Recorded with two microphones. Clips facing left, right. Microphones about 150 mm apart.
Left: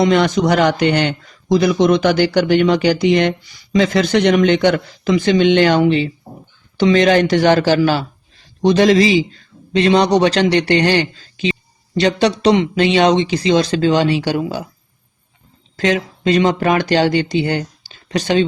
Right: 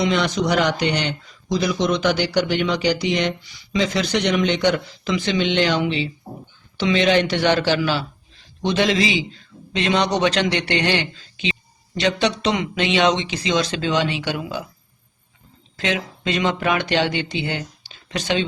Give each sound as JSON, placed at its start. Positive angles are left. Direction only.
{"t": 0.0, "sound": "a man's voice", "side_deg": 50}
{"t": 15.7, "sound": "speech", "side_deg": 40}